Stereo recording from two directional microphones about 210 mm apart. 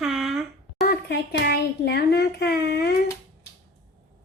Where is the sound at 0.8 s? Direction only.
50° left (ahead or behind).